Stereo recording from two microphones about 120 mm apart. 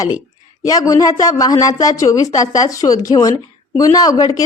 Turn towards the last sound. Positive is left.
turn(degrees=30)  # may be behind; listen again after turning